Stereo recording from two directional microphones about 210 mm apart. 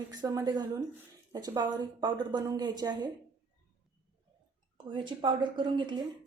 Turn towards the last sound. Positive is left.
turn(degrees=-20)  # may be behind; listen again after turning